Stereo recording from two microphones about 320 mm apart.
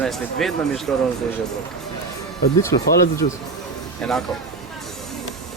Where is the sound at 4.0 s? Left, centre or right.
Centre.